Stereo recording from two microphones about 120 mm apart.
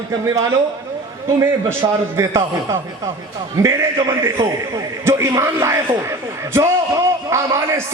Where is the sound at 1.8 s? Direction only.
40° right (ahead or behind).